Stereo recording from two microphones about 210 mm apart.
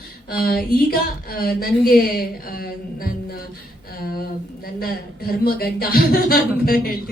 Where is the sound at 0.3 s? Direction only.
45° left (ahead or behind).